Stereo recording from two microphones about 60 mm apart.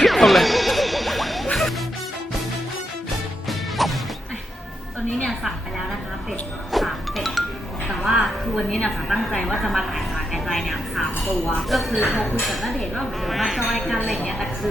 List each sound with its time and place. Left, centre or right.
0.0 s music: centre
3.8 s music: centre
6.7 s music: centre
8.2 s a woman's voice: centre